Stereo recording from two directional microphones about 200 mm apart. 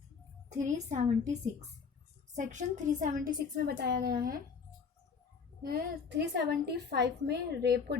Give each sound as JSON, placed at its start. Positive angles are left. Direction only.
{"t": 0.5, "sound": "a woman's voice", "side_deg": -35}
{"t": 5.6, "sound": "a woman's voice", "side_deg": -55}